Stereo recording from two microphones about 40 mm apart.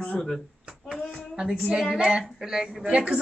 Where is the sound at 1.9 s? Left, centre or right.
Centre.